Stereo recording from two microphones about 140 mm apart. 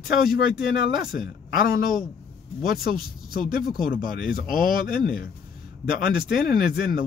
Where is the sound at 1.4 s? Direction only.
90° left.